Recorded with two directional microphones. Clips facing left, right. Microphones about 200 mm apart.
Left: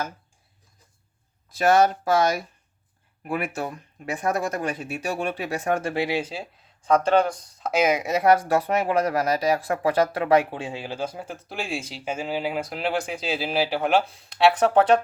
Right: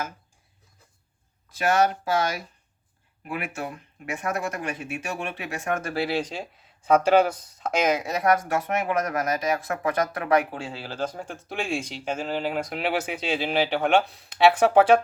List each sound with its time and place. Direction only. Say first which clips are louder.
1.5 s speech: left 5 dB; 35° left (ahead or behind)
3.2 s speech: left 4 dB; 40° left (ahead or behind)
5.9 s speech: left 1 dB; 15° left (ahead or behind)
6.8 s speech: right 1 dB; 5° right (ahead or behind); by 8.0 s 10° left (ahead or behind)
8.0 s speech: left 4 dB; 25° left (ahead or behind); by 15.0 s 10° right (ahead or behind)